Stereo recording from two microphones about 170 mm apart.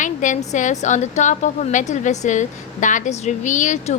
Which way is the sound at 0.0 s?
50° left (ahead or behind).